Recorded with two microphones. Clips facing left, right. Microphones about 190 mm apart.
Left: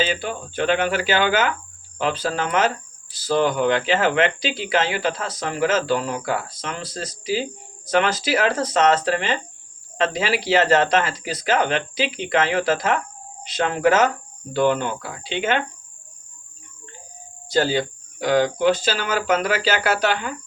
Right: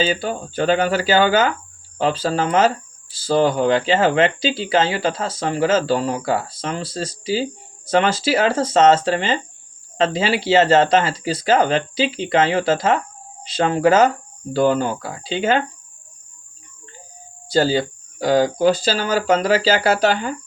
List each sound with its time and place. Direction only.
0.0 s speech: 35° right (ahead or behind)
17.5 s speech: 35° right (ahead or behind)